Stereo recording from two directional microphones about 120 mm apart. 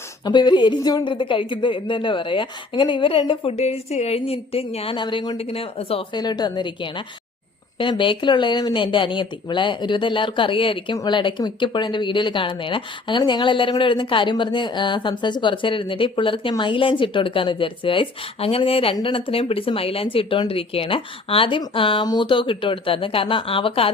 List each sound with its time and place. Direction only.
0.3 s speech: 40° left (ahead or behind); by 4.9 s 55° left (ahead or behind)
4.9 s a woman's voice: 40° left (ahead or behind)
5.4 s speech: 55° left (ahead or behind)
6.1 s a woman's voice: 35° left (ahead or behind)